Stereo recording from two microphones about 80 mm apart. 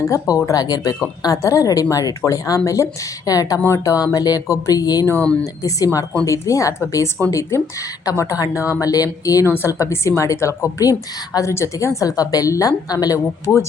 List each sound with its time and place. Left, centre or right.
0.0 s a woman's voice: left
9.5 s a woman's voice: left
13.4 s speech: left